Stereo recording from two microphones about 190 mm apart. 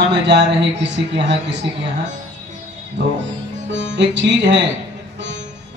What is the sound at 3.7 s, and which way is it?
Speech, 70° right (ahead or behind).